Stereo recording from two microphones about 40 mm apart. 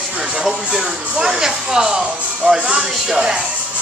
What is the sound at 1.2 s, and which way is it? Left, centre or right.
Speech, centre.